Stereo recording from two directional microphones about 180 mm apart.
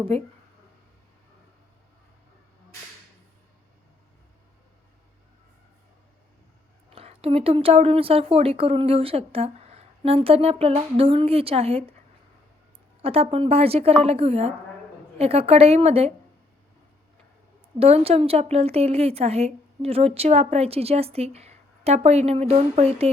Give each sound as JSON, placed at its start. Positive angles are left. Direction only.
{"t": 0.1, "sound": "a woman's voice", "side_deg": -35}
{"t": 6.9, "sound": "a woman's voice", "side_deg": -35}
{"t": 13.0, "sound": "a woman's voice", "side_deg": -30}
{"t": 17.7, "sound": "a woman's voice", "side_deg": -35}